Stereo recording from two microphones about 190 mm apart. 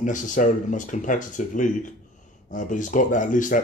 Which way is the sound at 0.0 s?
45° left (ahead or behind).